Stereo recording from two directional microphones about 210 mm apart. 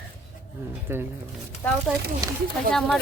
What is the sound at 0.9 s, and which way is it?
Speech, 10° right (ahead or behind).